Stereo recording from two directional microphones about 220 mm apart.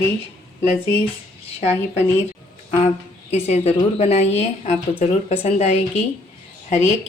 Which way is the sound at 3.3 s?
30° left (ahead or behind).